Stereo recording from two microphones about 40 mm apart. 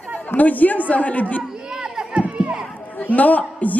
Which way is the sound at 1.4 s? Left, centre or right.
Centre.